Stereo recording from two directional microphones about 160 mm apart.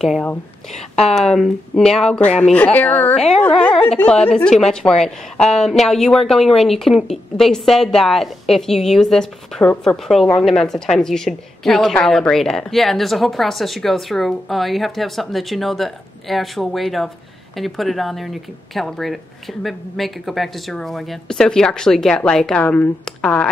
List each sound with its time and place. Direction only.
0.0 s a woman's voice: 5° left (ahead or behind)
0.7 s speech: 40° left (ahead or behind)
1.1 s a woman's voice: centre (ahead or behind)